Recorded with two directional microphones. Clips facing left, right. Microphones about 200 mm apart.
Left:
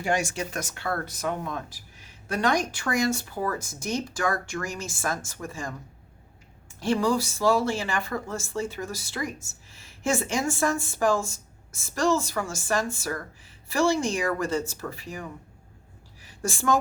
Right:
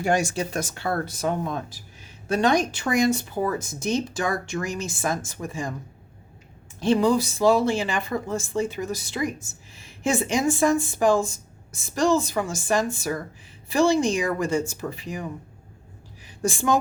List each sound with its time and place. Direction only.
0.0 s speech: 40° right (ahead or behind); by 5.7 s 15° right (ahead or behind)
6.7 s speech: 20° right (ahead or behind)
16.2 s a sound: 15° right (ahead or behind)